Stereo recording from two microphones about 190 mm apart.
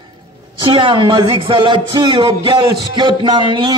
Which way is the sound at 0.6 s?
25° right (ahead or behind).